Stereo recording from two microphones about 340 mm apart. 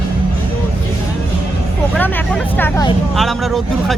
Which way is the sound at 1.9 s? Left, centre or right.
Centre.